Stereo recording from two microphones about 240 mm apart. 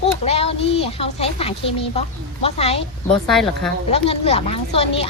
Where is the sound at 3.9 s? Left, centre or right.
Left.